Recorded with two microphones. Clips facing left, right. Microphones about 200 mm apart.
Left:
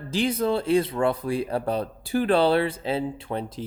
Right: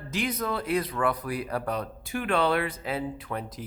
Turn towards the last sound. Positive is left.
turn(degrees=30)  # may be behind; listen again after turning